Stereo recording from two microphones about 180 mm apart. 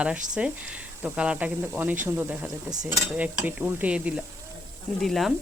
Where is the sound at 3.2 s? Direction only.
5° right (ahead or behind).